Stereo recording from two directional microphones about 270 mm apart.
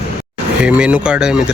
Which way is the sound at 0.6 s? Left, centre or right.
Centre.